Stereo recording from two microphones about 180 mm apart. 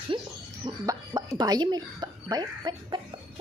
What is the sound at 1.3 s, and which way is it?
Speech, 25° right (ahead or behind).